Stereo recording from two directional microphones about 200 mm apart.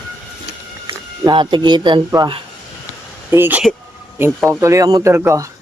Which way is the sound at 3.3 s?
10° right (ahead or behind).